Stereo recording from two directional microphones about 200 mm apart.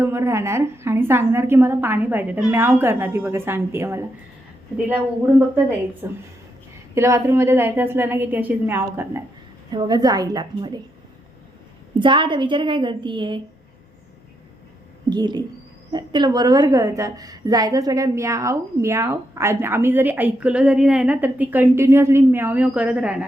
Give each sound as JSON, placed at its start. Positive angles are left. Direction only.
{"t": 0.0, "sound": "a woman's voice", "side_deg": -15}
{"t": 6.0, "sound": "a woman's voice", "side_deg": -10}
{"t": 11.9, "sound": "a woman's voice", "side_deg": -25}
{"t": 15.1, "sound": "a woman's voice", "side_deg": -20}